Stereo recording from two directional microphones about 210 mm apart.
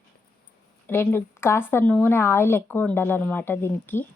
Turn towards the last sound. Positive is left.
turn(degrees=10)  # may be behind; listen again after turning